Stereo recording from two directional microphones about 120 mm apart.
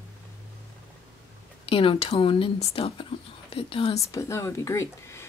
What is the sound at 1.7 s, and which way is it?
Speech, 50° left (ahead or behind).